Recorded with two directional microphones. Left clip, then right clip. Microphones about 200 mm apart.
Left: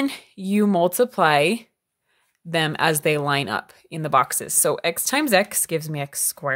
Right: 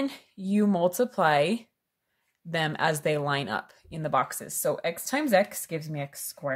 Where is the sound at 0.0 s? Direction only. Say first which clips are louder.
Left 6 dB; 35° left (ahead or behind).